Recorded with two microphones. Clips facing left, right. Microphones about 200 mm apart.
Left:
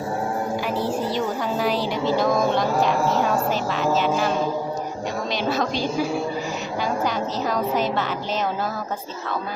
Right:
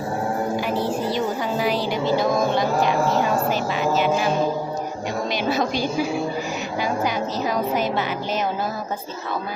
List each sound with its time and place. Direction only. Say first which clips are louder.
1.5 s a sound: even; centre (ahead or behind)
2.6 s speech: right 1 dB; 5° right (ahead or behind)
5.3 s a woman's voice: right 1 dB; 10° right (ahead or behind)